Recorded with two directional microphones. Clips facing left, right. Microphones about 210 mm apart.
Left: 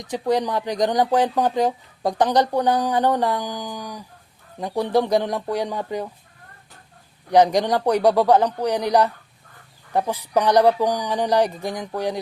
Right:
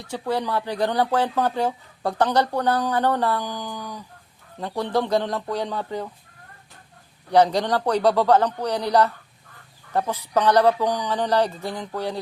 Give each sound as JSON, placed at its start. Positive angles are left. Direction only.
{"t": 0.0, "sound": "speech", "side_deg": 15}
{"t": 7.3, "sound": "speech", "side_deg": 15}